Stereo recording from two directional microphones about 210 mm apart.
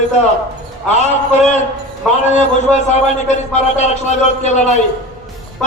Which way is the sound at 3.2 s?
35° left (ahead or behind).